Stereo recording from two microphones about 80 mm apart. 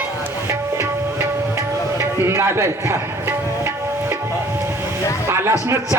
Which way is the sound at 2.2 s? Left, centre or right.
Right.